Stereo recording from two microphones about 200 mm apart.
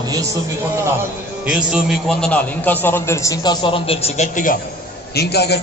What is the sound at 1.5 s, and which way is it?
A man's voice, 5° right (ahead or behind).